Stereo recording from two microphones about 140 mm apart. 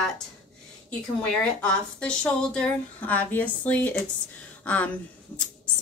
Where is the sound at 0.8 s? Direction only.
5° left (ahead or behind).